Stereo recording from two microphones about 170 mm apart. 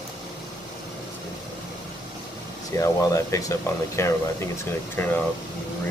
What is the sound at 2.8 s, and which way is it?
Speech, 20° left (ahead or behind).